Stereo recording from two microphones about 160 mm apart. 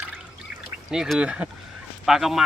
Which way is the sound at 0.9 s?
5° right (ahead or behind).